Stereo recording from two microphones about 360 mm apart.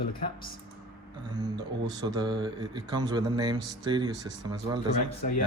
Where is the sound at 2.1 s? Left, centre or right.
Centre.